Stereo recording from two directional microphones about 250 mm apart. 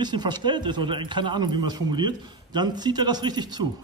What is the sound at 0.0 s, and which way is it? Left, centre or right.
A man's voice, centre.